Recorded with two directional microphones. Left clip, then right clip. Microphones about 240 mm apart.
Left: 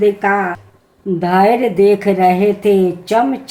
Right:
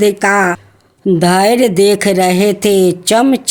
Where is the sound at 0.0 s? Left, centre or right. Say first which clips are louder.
Right 3 dB; right.